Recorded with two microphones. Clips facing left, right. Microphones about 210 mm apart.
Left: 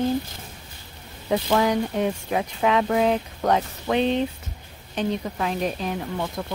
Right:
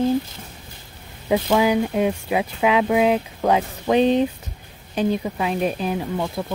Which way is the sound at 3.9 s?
20° right (ahead or behind).